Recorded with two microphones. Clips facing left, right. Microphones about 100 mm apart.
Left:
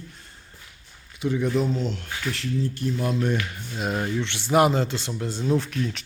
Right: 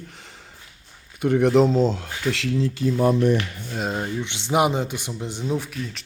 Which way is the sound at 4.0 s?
15° right (ahead or behind).